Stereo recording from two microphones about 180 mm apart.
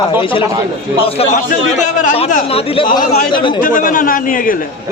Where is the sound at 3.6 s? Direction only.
50° left (ahead or behind).